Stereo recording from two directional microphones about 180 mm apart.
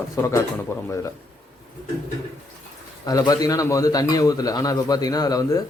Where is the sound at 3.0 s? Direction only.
20° left (ahead or behind).